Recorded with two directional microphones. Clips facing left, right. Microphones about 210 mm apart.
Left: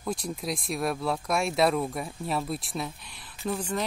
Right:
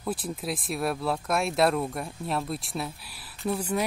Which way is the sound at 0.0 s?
5° right (ahead or behind).